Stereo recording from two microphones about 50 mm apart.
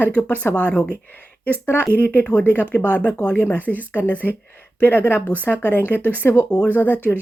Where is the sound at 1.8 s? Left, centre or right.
Left.